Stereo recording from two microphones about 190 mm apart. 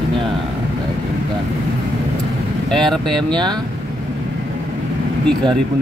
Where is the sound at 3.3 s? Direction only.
25° right (ahead or behind).